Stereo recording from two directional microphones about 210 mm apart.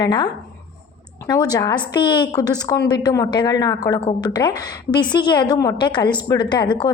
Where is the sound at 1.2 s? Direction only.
20° left (ahead or behind).